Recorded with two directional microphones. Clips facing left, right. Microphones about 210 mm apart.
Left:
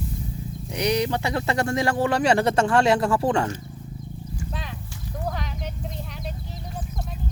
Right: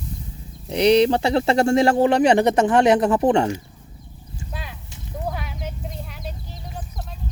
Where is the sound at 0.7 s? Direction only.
30° right (ahead or behind).